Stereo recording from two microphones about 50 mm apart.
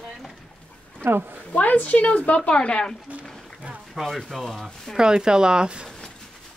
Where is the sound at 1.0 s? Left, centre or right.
Right.